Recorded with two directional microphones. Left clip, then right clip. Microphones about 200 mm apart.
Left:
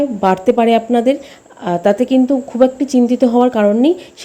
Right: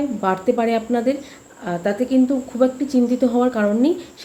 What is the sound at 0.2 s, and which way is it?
Speech, 30° left (ahead or behind).